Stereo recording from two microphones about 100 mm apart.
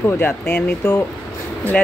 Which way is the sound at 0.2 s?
15° left (ahead or behind).